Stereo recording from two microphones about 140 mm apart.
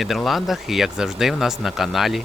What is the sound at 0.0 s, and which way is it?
Speech, centre (ahead or behind).